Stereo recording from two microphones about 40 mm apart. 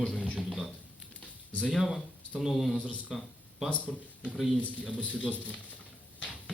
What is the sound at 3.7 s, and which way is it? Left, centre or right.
Speech, left.